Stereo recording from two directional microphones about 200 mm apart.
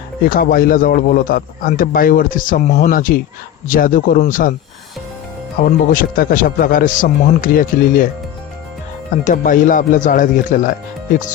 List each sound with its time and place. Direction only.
0.3 s a man's voice: 45° left (ahead or behind)
5.5 s a man's voice: 45° left (ahead or behind)
9.2 s speech: 40° left (ahead or behind)